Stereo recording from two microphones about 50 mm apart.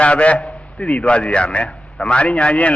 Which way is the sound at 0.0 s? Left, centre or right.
Left.